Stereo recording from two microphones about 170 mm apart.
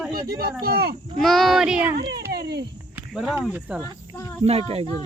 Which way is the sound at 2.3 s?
70° right (ahead or behind).